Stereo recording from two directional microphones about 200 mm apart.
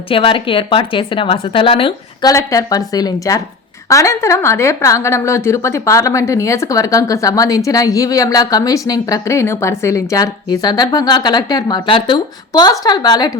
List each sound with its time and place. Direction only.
0.1 s a woman's voice: 25° left (ahead or behind)
2.3 s a woman's voice: 15° left (ahead or behind)